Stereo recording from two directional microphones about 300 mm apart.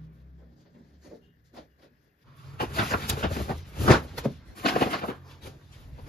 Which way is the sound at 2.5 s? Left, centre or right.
Left.